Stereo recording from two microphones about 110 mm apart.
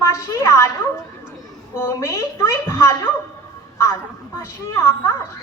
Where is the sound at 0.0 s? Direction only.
25° left (ahead or behind).